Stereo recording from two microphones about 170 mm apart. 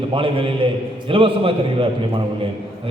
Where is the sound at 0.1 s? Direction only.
30° right (ahead or behind).